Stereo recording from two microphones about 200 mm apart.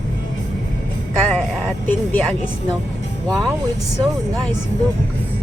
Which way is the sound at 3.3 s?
15° right (ahead or behind).